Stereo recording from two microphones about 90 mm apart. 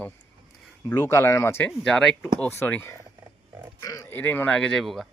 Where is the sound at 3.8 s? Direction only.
40° left (ahead or behind).